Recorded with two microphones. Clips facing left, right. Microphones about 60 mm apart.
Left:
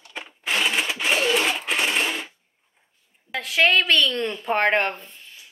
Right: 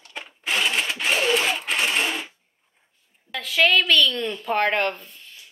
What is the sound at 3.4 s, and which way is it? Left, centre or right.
A woman's voice, left.